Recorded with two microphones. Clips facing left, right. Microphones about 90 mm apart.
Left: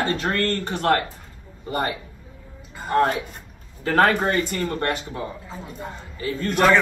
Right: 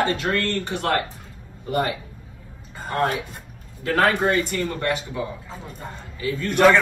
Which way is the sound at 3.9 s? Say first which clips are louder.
Left 1 dB; 40° left (ahead or behind).